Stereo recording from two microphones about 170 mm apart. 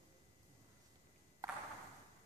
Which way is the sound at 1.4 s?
20° right (ahead or behind).